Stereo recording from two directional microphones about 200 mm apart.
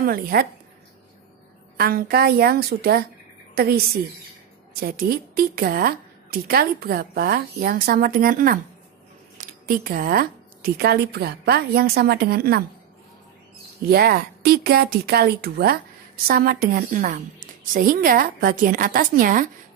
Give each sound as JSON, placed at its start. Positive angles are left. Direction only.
{"t": 0.0, "sound": "a woman's voice", "side_deg": -50}
{"t": 1.8, "sound": "a woman's voice", "side_deg": -50}
{"t": 13.8, "sound": "a woman's voice", "side_deg": -50}